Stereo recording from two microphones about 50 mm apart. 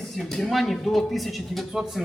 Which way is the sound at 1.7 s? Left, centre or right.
Centre.